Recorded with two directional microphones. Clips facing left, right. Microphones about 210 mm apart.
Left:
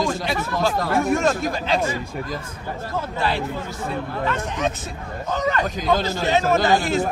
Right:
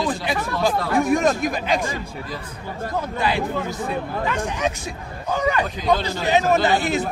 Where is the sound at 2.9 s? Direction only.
15° right (ahead or behind).